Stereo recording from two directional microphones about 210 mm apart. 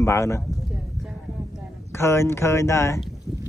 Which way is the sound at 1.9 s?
10° left (ahead or behind).